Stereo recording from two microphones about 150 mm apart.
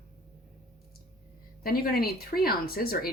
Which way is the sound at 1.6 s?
80° left.